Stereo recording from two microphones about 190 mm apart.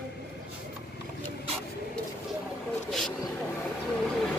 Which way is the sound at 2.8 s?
Centre (ahead or behind).